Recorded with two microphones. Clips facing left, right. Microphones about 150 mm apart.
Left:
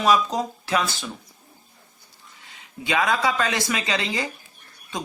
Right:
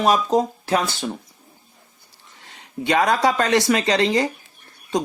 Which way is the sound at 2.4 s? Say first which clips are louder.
Right 8 dB; 40° right (ahead or behind).